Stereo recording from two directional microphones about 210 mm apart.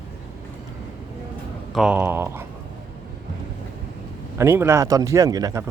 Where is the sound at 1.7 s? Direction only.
5° right (ahead or behind).